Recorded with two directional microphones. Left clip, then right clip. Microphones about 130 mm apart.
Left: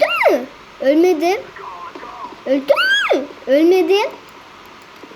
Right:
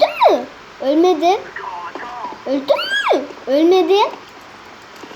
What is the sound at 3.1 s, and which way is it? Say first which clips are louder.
Speech: even; centre (ahead or behind).